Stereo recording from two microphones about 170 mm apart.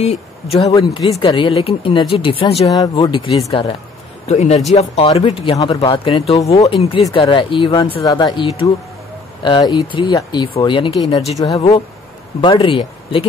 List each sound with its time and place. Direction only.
0.0 s speech: 40° left (ahead or behind)
0.6 s speech: 20° left (ahead or behind)
4.3 s speech: 40° left (ahead or behind)
6.4 s speech: 20° left (ahead or behind)
6.7 s speech: 30° left (ahead or behind)